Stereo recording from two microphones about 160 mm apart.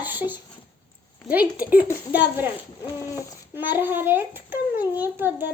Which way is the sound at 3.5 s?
10° right (ahead or behind).